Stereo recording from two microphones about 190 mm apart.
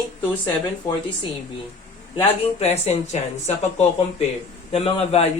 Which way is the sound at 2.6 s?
35° left (ahead or behind).